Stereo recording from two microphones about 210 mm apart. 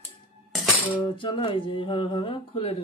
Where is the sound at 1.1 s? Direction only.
25° left (ahead or behind).